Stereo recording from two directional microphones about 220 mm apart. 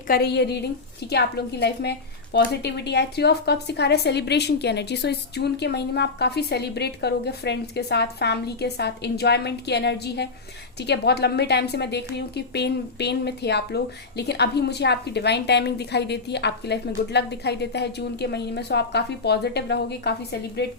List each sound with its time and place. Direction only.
0.1 s a woman's voice: 45° left (ahead or behind)